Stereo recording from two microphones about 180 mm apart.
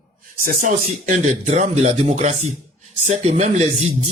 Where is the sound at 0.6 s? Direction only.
40° right (ahead or behind).